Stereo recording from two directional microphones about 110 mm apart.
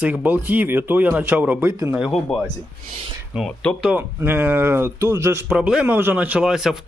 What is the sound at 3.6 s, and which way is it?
Speech, 15° left (ahead or behind).